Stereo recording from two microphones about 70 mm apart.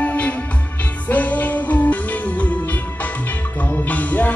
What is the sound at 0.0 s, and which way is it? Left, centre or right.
Music, centre.